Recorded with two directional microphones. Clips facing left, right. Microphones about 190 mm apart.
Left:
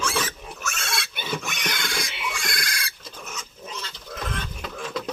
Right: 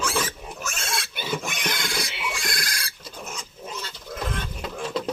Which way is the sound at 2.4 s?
40° right (ahead or behind).